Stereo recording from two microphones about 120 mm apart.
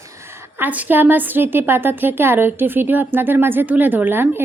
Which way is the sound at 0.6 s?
15° right (ahead or behind).